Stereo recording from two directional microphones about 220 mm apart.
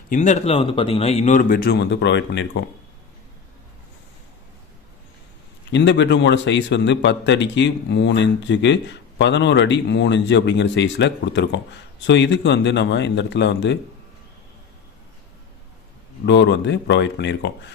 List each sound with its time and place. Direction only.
0.1 s speech: 30° left (ahead or behind); by 2.6 s 55° left (ahead or behind)
5.7 s a man's voice: 55° left (ahead or behind)
16.2 s speech: 55° left (ahead or behind)